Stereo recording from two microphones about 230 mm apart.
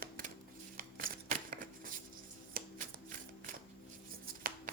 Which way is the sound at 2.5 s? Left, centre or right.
Right.